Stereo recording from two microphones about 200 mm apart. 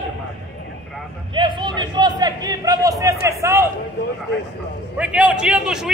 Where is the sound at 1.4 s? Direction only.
25° right (ahead or behind).